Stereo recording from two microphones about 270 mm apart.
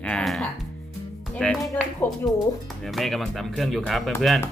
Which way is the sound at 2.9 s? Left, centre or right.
Centre.